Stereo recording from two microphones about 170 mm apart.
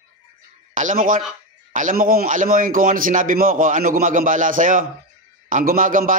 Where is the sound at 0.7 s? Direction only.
50° right (ahead or behind).